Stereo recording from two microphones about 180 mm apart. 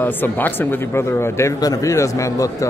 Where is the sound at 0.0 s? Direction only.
10° left (ahead or behind).